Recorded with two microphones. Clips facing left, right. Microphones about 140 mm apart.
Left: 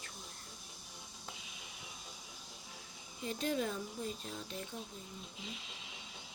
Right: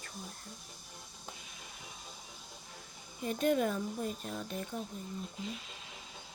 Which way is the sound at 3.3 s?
55° right (ahead or behind).